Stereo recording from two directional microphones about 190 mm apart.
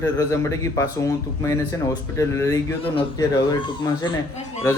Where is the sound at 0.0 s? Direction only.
15° left (ahead or behind).